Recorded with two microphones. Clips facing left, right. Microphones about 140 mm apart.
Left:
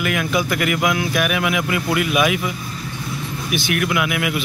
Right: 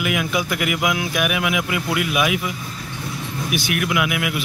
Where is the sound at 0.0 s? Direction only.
10° right (ahead or behind).